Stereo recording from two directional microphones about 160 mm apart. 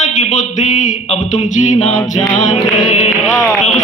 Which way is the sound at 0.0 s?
50° left (ahead or behind).